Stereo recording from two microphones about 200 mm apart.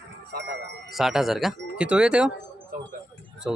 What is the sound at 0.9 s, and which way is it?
Speech, centre (ahead or behind).